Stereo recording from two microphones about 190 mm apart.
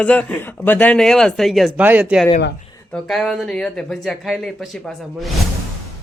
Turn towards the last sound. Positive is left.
turn(degrees=0)  # may be behind; listen again after turning